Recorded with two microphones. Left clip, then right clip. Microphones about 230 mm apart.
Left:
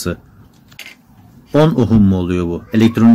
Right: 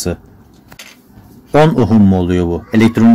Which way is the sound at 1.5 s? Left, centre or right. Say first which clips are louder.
Right 3 dB; centre.